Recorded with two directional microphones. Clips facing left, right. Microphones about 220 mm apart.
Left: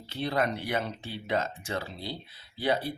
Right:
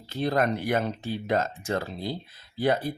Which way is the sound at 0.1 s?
45° right (ahead or behind).